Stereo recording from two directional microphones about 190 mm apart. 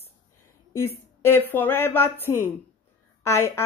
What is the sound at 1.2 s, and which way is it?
Speech, 10° left (ahead or behind).